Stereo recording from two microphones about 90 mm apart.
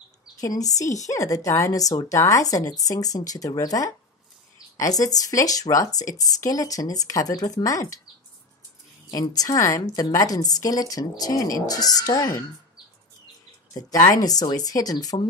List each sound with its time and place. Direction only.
0.4 s a woman's voice: 40° left (ahead or behind)
9.1 s a woman's voice: 45° left (ahead or behind)
14.1 s a woman's voice: 45° left (ahead or behind)